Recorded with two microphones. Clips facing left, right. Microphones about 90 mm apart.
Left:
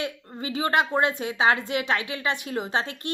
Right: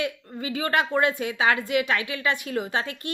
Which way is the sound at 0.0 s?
30° left (ahead or behind).